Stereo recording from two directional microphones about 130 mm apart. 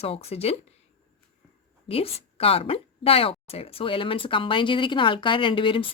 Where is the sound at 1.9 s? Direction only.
50° left (ahead or behind).